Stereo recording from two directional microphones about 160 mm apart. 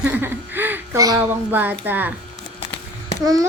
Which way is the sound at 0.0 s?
10° right (ahead or behind).